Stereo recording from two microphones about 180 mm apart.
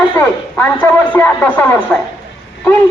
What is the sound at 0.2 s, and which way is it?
Speech, 10° left (ahead or behind).